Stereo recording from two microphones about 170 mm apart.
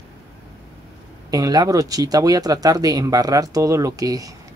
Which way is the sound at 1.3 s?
20° right (ahead or behind).